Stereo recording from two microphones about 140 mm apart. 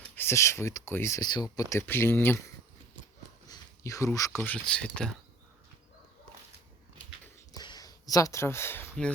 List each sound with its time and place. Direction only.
0.2 s speech: 20° left (ahead or behind)
3.5 s speech: 25° left (ahead or behind); by 5.1 s 5° left (ahead or behind)
7.5 s a sound: 30° left (ahead or behind)